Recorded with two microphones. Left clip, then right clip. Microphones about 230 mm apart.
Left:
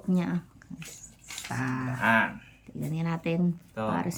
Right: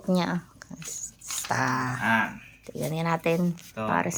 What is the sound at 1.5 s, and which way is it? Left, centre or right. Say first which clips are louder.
Speech: right 8 dB; right.